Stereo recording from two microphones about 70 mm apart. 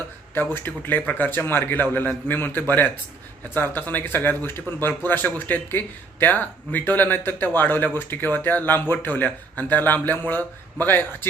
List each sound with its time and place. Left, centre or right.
0.5 s a man's voice: left